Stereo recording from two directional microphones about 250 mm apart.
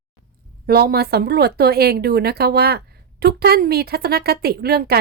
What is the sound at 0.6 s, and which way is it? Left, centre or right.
A woman's voice, right.